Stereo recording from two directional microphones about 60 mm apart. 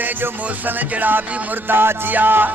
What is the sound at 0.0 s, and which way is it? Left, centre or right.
Music, right.